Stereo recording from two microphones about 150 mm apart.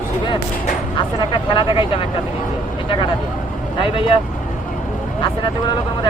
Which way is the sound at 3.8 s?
35° left (ahead or behind).